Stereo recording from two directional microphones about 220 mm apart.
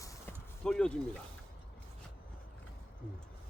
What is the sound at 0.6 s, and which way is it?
Speech, 5° left (ahead or behind).